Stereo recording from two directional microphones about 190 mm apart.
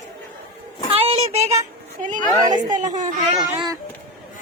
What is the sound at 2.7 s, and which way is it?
Speech, 40° right (ahead or behind).